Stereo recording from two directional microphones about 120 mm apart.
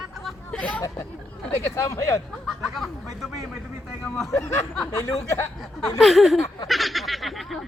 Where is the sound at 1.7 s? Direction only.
30° left (ahead or behind).